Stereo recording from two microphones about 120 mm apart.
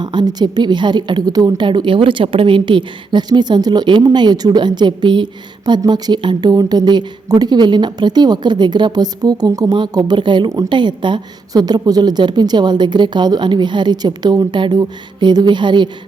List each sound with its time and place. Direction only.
0.0 s a woman's voice: 35° right (ahead or behind)